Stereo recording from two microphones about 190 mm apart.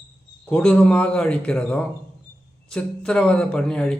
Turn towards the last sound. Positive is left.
turn(degrees=5)  # may be behind; listen again after turning